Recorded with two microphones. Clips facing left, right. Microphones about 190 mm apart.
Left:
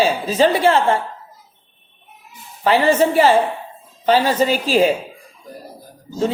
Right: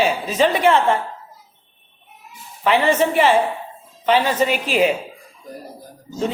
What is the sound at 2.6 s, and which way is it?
A man's voice, 35° left (ahead or behind).